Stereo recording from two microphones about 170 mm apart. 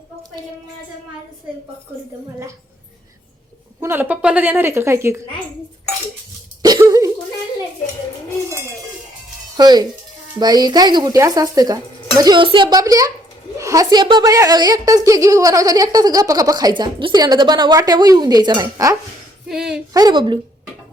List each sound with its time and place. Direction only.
3.8 s a woman's voice: 15° right (ahead or behind)
6.6 s a sound: 25° right (ahead or behind)
9.6 s a woman's voice: 25° right (ahead or behind)
19.5 s speech: centre (ahead or behind)
19.9 s a woman's voice: 25° right (ahead or behind)